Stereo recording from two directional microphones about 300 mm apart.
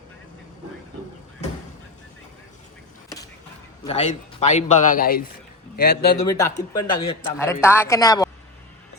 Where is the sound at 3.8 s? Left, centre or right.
Left.